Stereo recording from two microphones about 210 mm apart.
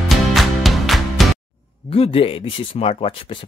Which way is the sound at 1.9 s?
25° left (ahead or behind).